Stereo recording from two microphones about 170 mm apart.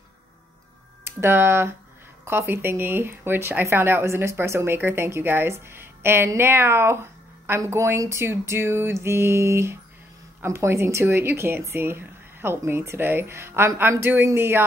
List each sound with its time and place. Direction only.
1.0 s speech: 15° right (ahead or behind)